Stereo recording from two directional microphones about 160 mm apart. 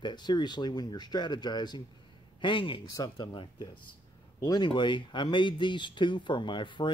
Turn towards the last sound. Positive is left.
turn(degrees=30)  # may be behind; listen again after turning